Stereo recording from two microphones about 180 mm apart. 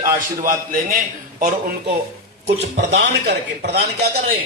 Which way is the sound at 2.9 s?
65° right (ahead or behind).